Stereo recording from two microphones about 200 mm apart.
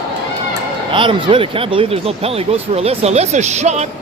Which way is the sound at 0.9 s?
25° right (ahead or behind).